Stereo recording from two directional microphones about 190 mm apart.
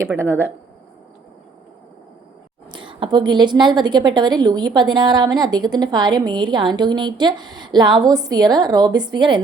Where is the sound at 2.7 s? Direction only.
25° right (ahead or behind).